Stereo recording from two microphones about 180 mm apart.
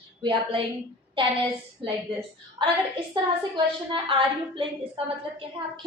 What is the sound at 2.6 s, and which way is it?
A woman's voice, 30° right (ahead or behind).